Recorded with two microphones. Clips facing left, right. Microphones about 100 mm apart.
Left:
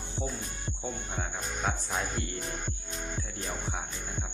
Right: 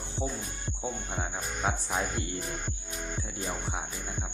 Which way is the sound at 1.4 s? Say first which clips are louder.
Right 1 dB; 10° right (ahead or behind).